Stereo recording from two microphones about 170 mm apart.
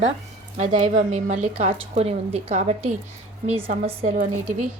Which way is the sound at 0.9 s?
45° right (ahead or behind).